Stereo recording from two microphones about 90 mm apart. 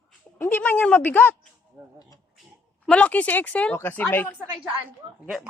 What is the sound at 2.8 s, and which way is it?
Speech, 15° left (ahead or behind).